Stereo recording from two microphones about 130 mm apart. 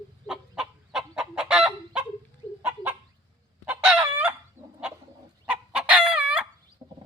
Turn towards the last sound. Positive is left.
turn(degrees=-35)  # may be behind; listen again after turning